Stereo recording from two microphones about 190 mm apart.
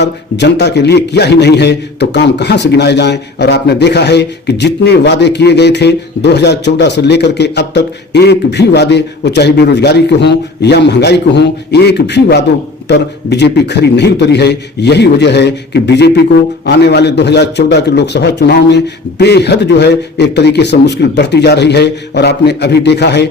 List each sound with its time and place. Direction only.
0.0 s a man's voice: 65° left (ahead or behind)